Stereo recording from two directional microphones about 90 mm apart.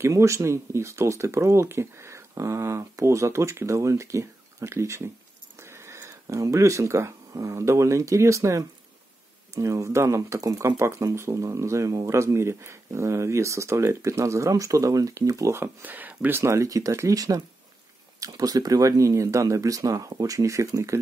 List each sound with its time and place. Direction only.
0.0 s speech: 35° right (ahead or behind)